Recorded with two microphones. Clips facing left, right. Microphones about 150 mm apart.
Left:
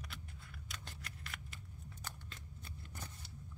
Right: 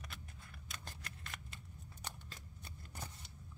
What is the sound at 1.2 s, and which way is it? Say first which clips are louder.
Scissors: even; 25° right (ahead or behind).